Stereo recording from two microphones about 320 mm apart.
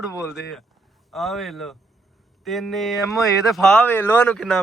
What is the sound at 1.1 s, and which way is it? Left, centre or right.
Speech, centre.